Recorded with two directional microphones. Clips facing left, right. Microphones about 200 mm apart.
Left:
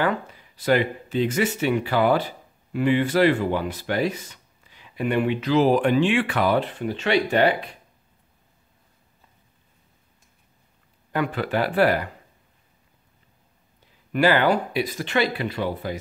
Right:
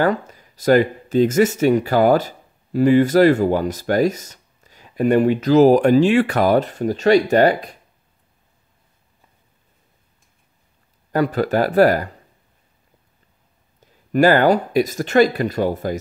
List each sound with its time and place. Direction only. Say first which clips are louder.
0.0 s speech: right 5 dB; 40° right (ahead or behind)
11.1 s speech: right 6 dB; 40° right (ahead or behind)
13.7 s speech: right 7 dB; 45° right (ahead or behind)